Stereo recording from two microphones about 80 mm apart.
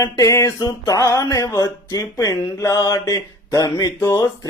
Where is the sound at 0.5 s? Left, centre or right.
Left.